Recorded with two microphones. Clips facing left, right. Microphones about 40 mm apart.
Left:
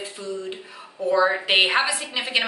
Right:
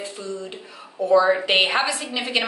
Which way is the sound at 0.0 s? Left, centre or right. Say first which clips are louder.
Even; centre.